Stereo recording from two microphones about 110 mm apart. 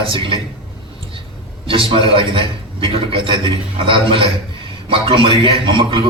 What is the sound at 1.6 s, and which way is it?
A man's voice, 55° right (ahead or behind).